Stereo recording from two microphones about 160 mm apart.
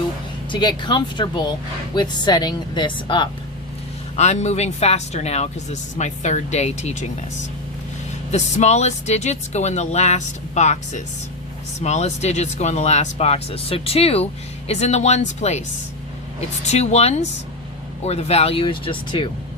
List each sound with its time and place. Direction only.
0.5 s speech: 30° left (ahead or behind)
4.1 s speech: 45° left (ahead or behind)
8.3 s speech: 45° left (ahead or behind)
16.6 s speech: 45° left (ahead or behind)